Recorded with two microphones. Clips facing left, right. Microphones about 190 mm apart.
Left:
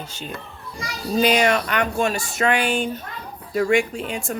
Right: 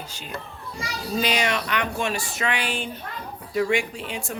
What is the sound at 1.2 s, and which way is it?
Speech, 50° left (ahead or behind).